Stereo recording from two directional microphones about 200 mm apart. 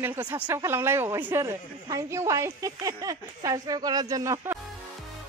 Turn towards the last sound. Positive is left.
turn(degrees=-15)  # may be behind; listen again after turning